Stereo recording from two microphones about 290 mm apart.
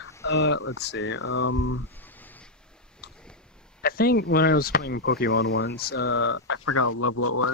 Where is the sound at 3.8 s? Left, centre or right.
Left.